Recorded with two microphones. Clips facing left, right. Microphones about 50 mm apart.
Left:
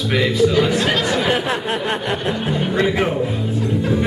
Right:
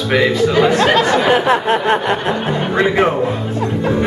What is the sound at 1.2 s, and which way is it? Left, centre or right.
Speech, centre.